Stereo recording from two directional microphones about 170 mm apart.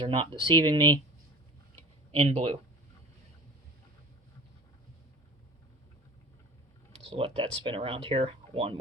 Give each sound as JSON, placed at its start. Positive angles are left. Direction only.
{"t": 0.0, "sound": "speech", "side_deg": -30}
{"t": 2.1, "sound": "speech", "side_deg": -35}
{"t": 6.9, "sound": "speech", "side_deg": -35}